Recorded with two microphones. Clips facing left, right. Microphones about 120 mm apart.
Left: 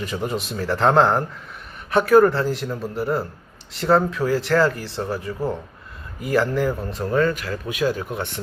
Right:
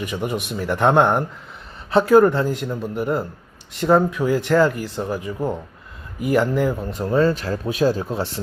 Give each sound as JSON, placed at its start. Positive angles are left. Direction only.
{"t": 0.0, "sound": "speech", "side_deg": -15}